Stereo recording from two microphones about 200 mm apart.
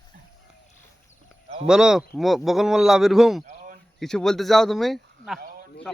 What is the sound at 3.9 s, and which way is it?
Speech, centre (ahead or behind).